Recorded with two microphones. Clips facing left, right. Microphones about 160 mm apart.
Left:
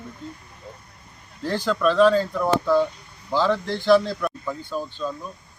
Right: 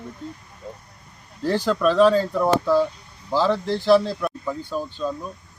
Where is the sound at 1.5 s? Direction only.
5° right (ahead or behind).